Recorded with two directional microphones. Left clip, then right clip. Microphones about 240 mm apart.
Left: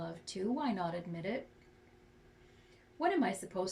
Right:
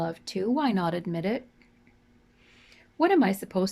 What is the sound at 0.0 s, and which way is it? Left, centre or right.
Speech, right.